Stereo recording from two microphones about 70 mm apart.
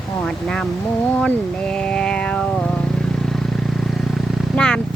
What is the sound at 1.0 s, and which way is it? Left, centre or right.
Vehicle, centre.